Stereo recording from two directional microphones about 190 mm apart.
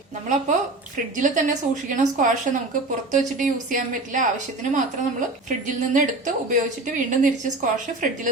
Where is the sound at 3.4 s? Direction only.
40° right (ahead or behind).